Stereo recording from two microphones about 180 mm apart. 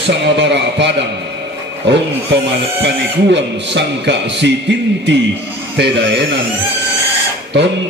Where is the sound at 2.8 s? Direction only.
75° right (ahead or behind).